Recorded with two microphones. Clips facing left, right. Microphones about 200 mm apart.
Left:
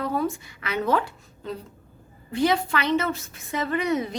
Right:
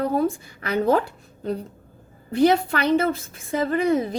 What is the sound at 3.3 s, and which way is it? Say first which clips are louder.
Speech: right 4 dB; 30° right (ahead or behind).